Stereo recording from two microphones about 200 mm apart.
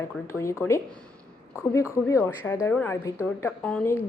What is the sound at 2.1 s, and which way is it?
A woman's voice, 10° left (ahead or behind).